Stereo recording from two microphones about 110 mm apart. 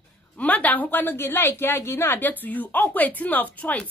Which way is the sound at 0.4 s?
15° left (ahead or behind).